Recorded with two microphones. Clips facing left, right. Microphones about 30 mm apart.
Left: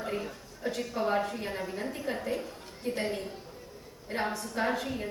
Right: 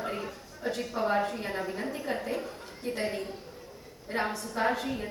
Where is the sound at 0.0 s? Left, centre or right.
Centre.